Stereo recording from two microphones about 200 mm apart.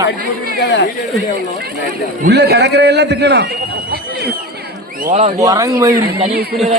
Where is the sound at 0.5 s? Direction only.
60° left (ahead or behind).